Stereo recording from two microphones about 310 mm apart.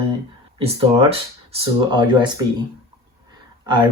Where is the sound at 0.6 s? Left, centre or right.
Centre.